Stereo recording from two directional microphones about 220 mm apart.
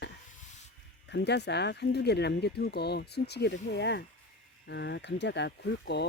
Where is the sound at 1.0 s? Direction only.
50° left (ahead or behind).